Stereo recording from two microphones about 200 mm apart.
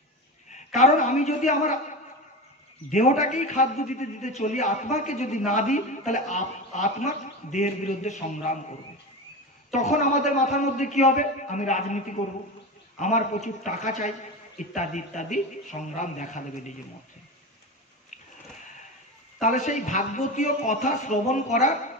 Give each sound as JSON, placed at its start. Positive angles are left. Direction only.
{"t": 0.5, "sound": "a man's voice", "side_deg": 35}
{"t": 9.7, "sound": "a man's voice", "side_deg": 35}
{"t": 19.4, "sound": "a man's voice", "side_deg": 35}